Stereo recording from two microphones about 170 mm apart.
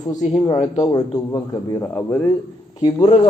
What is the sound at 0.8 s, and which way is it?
Speech, 20° left (ahead or behind).